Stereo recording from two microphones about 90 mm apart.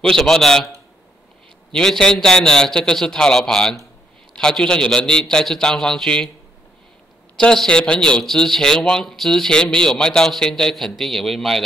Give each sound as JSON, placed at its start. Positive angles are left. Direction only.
{"t": 0.0, "sound": "a man's voice", "side_deg": 5}
{"t": 1.7, "sound": "a man's voice", "side_deg": 5}
{"t": 7.3, "sound": "a man's voice", "side_deg": 10}